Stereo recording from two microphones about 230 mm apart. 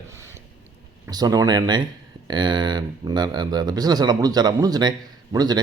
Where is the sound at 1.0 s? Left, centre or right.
Centre.